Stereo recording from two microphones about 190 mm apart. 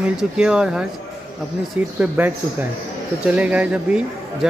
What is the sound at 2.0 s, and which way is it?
Speech, 10° right (ahead or behind).